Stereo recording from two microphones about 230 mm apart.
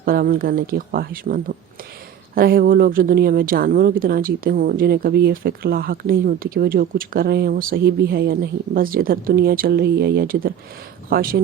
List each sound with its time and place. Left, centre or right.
0.0 s speech: right